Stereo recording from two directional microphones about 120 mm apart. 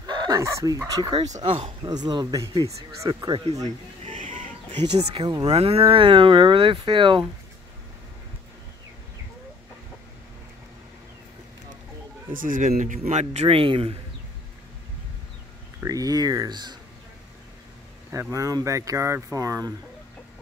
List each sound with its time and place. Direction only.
0.0 s dog: 35° right (ahead or behind)
0.4 s speech: 25° right (ahead or behind)
1.1 s speech: 65° right (ahead or behind)
1.6 s speech: 35° right (ahead or behind)
4.0 s chicken: 90° right
4.7 s speech: 40° right (ahead or behind)
5.5 s speech: 55° right (ahead or behind)
12.5 s speech: 85° right; by 13.6 s 70° right (ahead or behind)
13.6 s speech: 50° right (ahead or behind)
15.8 s speech: 30° right (ahead or behind)
18.3 s speech: 25° right (ahead or behind)